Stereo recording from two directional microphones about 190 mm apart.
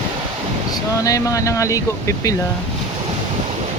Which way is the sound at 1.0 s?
15° left (ahead or behind).